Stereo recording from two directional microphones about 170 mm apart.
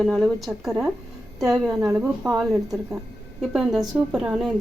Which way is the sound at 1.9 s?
15° right (ahead or behind).